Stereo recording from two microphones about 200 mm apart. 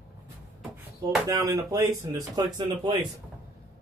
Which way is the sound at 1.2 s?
15° right (ahead or behind).